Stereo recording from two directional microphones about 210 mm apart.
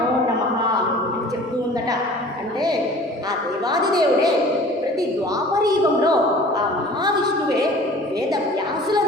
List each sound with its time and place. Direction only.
3.7 s a woman's voice: 20° right (ahead or behind)
5.6 s a woman's voice: 15° right (ahead or behind)